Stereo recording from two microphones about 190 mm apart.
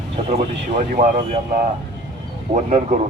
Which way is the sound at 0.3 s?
35° right (ahead or behind).